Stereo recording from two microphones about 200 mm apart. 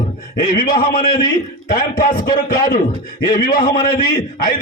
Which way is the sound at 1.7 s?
45° left (ahead or behind).